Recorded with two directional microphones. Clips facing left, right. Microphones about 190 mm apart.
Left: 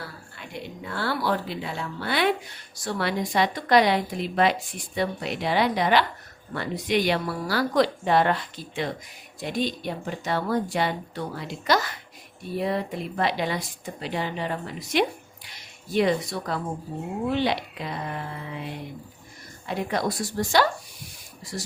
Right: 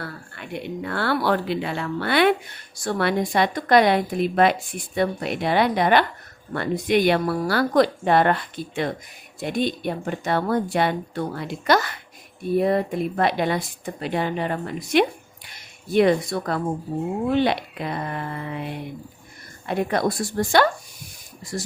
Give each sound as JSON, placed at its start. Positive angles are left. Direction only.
{"t": 0.0, "sound": "a woman's voice", "side_deg": -60}